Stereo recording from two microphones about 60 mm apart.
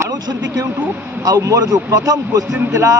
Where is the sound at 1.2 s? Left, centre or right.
Right.